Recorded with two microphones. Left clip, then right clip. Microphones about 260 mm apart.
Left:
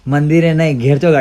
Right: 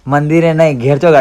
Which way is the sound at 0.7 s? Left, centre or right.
Right.